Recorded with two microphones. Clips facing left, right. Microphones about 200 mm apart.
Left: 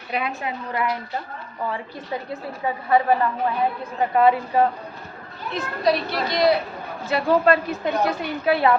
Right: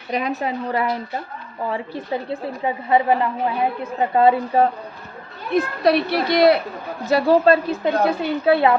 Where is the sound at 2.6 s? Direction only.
20° right (ahead or behind).